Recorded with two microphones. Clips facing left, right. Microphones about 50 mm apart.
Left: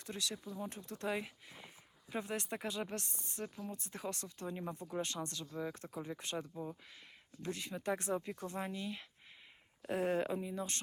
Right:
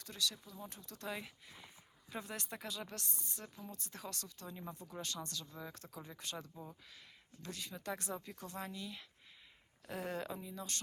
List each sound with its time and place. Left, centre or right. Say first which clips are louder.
0.0 s speech: even; left
6.5 s speech: left 7 dB; centre
7.4 s speech: left 6 dB; left